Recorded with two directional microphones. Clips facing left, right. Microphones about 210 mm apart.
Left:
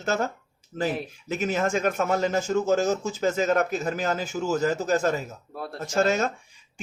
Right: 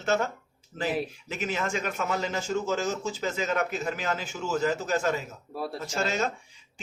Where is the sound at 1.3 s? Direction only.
45° left (ahead or behind).